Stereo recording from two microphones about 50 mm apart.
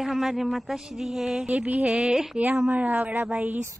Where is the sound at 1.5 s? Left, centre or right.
Right.